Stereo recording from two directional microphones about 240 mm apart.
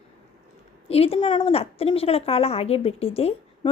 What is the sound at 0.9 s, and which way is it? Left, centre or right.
A woman's voice, left.